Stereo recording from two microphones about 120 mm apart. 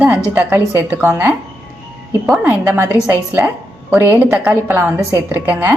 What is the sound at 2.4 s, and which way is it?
A woman's voice, 20° right (ahead or behind).